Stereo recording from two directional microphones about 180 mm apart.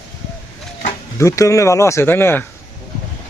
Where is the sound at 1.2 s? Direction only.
15° left (ahead or behind).